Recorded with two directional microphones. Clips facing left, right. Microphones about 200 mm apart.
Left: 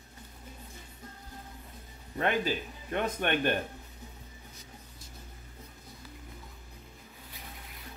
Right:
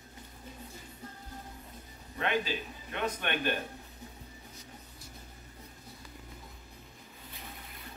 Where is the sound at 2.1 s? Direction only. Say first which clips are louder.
Left 3 dB; 45° left (ahead or behind).